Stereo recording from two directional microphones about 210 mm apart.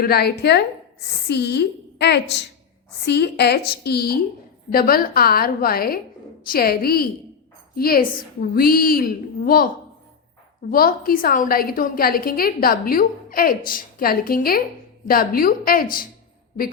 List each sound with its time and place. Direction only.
0.0 s a woman's voice: 50° left (ahead or behind)
10.7 s a woman's voice: 45° left (ahead or behind)